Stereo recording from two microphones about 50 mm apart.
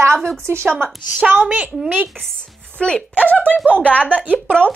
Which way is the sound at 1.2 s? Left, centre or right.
Right.